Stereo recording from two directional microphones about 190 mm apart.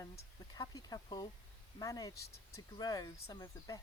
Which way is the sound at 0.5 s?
20° left (ahead or behind).